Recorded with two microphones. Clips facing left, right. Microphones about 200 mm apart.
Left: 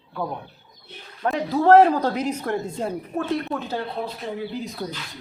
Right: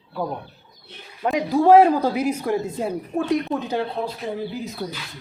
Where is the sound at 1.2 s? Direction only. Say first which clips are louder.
Right 3 dB; 10° right (ahead or behind).